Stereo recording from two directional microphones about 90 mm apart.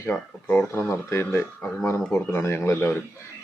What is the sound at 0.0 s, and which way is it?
Speech, 25° left (ahead or behind).